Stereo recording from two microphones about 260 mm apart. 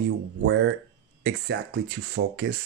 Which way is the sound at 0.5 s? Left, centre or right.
Right.